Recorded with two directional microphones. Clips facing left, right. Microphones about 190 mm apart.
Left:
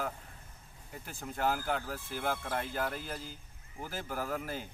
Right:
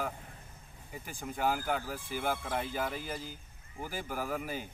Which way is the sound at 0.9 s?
5° right (ahead or behind).